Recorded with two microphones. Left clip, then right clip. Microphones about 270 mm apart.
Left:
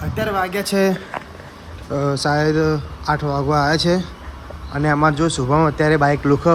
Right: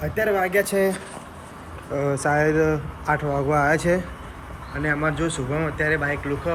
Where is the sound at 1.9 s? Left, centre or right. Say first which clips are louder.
Left 2 dB; centre.